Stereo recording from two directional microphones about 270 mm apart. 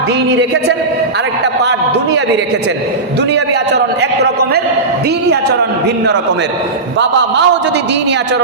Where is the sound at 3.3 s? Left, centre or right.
Right.